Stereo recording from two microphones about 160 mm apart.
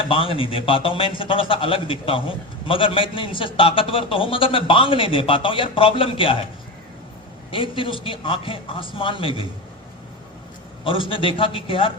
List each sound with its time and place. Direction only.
0.0 s a man's voice: 35° left (ahead or behind)
7.5 s a man's voice: 30° left (ahead or behind)
10.8 s a man's voice: 30° left (ahead or behind)